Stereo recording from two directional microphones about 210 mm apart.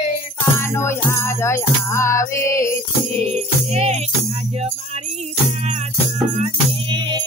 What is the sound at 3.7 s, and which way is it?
Music, 30° right (ahead or behind).